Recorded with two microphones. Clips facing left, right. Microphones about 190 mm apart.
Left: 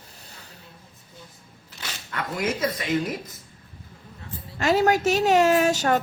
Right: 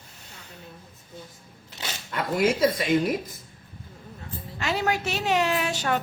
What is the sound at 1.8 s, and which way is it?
Speech, 25° right (ahead or behind).